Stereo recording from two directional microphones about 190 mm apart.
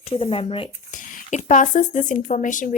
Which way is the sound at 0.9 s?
40° left (ahead or behind).